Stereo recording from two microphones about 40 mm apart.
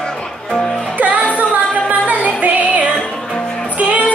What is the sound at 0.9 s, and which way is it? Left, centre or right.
Music, right.